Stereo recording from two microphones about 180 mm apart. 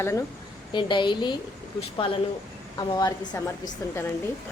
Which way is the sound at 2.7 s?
25° left (ahead or behind).